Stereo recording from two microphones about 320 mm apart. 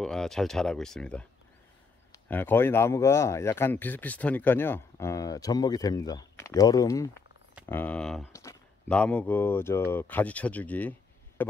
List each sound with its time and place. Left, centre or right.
0.0 s speech: centre
2.2 s speech: centre